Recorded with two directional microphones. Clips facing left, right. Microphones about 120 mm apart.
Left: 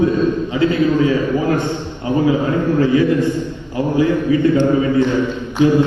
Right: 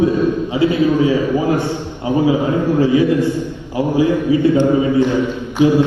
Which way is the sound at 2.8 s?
15° right (ahead or behind).